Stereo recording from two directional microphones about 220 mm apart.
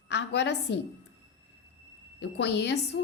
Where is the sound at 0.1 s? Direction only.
50° left (ahead or behind).